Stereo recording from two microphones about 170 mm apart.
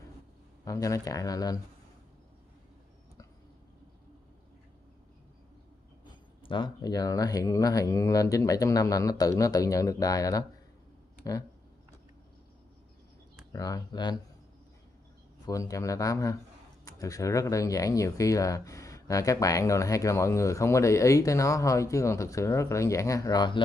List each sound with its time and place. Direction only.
0.7 s speech: 20° left (ahead or behind)
6.4 s speech: 30° left (ahead or behind)
13.5 s speech: 20° left (ahead or behind)
15.4 s speech: 20° left (ahead or behind)